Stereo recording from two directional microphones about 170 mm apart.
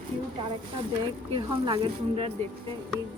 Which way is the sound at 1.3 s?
30° right (ahead or behind).